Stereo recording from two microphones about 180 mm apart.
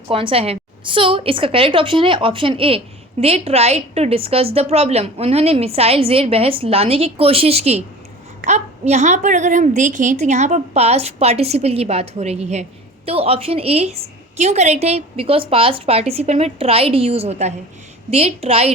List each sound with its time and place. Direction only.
0.1 s a woman's voice: 30° right (ahead or behind)